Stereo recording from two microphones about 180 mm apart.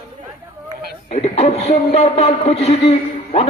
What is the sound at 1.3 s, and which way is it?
Speech, 35° left (ahead or behind).